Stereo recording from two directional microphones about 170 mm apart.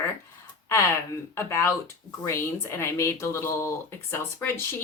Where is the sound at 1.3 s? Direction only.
15° left (ahead or behind).